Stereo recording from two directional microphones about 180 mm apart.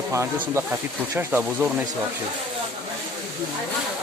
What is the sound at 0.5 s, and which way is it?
Speech, 10° right (ahead or behind).